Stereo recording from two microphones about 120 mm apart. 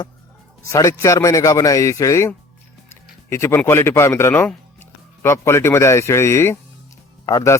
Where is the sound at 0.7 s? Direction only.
25° left (ahead or behind).